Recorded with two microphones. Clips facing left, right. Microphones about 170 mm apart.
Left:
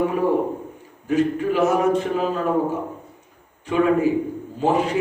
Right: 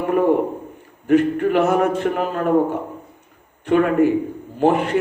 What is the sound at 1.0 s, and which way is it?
A man's voice, 60° right (ahead or behind).